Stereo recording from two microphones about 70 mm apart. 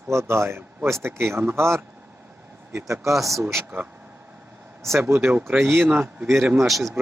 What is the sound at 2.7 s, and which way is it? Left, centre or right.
Speech, right.